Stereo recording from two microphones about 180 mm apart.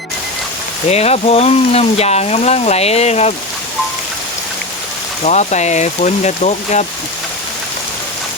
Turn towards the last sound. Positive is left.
turn(degrees=40)  # may be behind; listen again after turning